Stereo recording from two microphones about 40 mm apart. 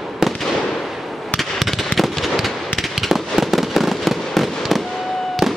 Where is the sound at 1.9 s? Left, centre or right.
Centre.